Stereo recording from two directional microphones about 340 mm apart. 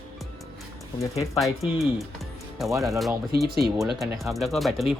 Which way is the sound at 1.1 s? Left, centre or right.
Centre.